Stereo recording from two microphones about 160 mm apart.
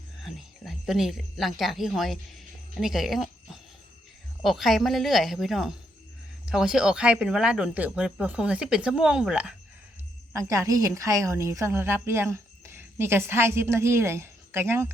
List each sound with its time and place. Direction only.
0.3 s a woman's voice: centre (ahead or behind)
10.5 s a woman's voice: 20° right (ahead or behind)